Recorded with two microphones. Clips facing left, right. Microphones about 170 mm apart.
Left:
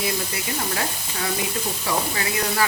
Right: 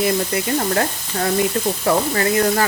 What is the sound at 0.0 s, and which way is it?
Speech, 50° right (ahead or behind).